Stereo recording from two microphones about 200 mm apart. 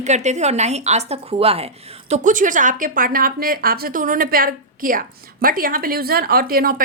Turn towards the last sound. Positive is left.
turn(degrees=-45)  # may be behind; listen again after turning